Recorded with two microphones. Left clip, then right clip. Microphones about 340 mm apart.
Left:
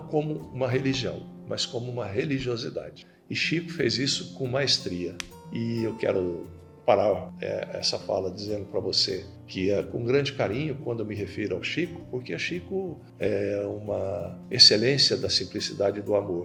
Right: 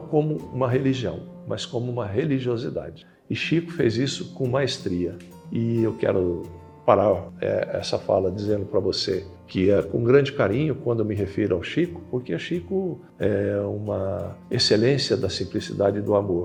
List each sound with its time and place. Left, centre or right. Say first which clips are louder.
0.1 s speech: right 5 dB; right